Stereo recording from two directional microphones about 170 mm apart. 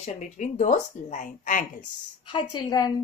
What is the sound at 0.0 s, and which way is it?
A woman's voice, 45° left (ahead or behind).